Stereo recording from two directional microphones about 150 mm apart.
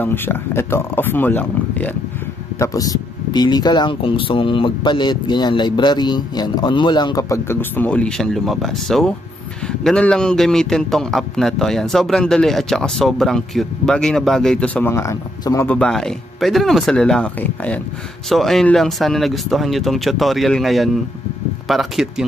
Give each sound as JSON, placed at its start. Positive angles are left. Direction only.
{"t": 0.0, "sound": "speech", "side_deg": 15}
{"t": 2.6, "sound": "a man's voice", "side_deg": 25}
{"t": 15.7, "sound": "a man's voice", "side_deg": 5}